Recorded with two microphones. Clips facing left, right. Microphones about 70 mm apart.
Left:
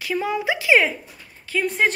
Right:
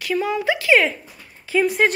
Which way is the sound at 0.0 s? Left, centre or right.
Left.